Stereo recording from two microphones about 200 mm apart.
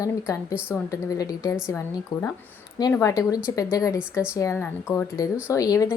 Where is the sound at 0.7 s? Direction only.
15° left (ahead or behind).